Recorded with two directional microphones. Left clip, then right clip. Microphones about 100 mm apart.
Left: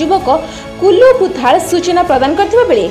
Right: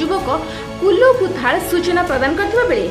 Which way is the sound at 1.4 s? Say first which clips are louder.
Left 6 dB; 40° left (ahead or behind).